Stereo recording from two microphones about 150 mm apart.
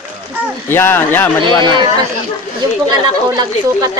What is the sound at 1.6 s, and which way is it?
Speech, 30° right (ahead or behind).